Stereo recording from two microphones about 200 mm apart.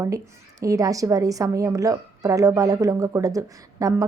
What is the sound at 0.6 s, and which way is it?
A woman's voice, 15° right (ahead or behind).